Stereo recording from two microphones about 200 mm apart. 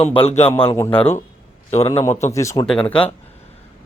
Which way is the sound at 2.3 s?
15° left (ahead or behind).